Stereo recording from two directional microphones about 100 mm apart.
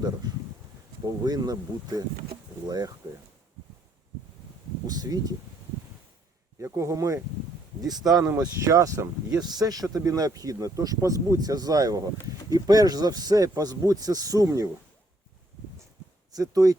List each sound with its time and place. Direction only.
0.2 s speech: 45° right (ahead or behind)
4.9 s speech: 40° right (ahead or behind)
6.6 s speech: 30° right (ahead or behind)
9.4 s speech: 45° right (ahead or behind)
16.3 s speech: 35° right (ahead or behind)